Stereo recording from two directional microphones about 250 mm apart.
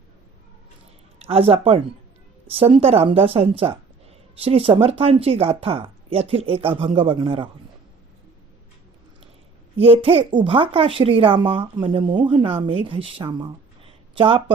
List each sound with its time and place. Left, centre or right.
1.2 s speech: right
9.8 s speech: right